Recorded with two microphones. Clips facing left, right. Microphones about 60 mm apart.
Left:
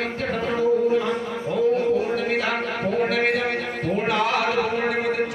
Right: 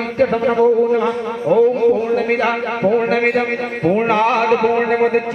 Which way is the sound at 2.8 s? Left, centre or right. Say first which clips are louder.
Right 7 dB; right.